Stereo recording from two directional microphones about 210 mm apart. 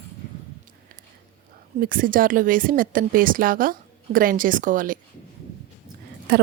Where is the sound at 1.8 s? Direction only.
40° right (ahead or behind).